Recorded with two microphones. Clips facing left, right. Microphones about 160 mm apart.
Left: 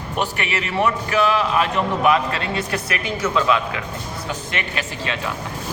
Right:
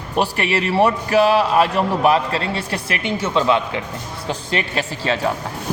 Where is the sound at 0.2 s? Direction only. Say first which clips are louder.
Right 5 dB; 35° right (ahead or behind).